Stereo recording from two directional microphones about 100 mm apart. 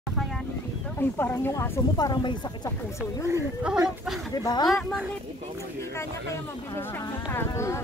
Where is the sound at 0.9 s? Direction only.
20° left (ahead or behind).